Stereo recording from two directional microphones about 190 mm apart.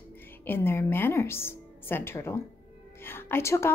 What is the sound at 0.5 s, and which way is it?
A woman's voice, 10° left (ahead or behind).